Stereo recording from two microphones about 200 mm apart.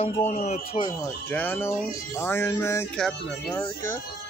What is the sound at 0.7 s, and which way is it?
Speech, 25° left (ahead or behind).